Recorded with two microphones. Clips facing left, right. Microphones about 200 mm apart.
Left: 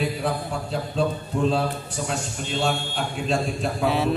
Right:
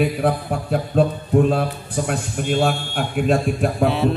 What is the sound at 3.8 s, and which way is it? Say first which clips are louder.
Mantra: right 4 dB; centre (ahead or behind).